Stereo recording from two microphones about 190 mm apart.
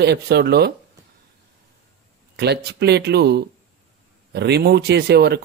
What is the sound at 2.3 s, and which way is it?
Speech, 60° right (ahead or behind).